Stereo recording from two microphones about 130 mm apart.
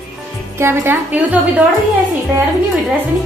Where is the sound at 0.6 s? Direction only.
20° right (ahead or behind).